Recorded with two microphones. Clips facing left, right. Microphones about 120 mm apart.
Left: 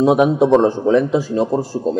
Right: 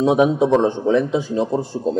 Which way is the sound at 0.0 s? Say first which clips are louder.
Left 2 dB; 5° left (ahead or behind).